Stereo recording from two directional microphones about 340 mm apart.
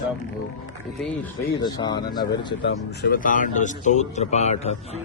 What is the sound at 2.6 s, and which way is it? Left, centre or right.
Speech, left.